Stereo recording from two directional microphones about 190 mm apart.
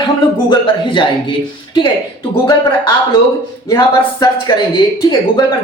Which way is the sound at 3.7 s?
20° left (ahead or behind).